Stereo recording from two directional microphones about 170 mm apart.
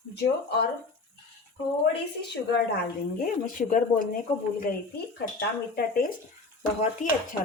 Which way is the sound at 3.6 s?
55° left (ahead or behind).